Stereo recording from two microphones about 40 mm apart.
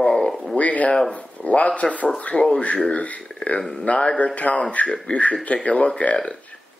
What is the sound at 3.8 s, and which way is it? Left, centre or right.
Speech, left.